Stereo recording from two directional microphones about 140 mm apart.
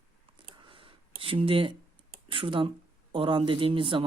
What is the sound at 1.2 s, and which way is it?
Speech, 40° right (ahead or behind).